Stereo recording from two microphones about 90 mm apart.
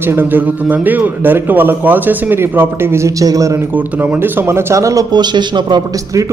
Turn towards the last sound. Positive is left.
turn(degrees=-55)  # may be behind; listen again after turning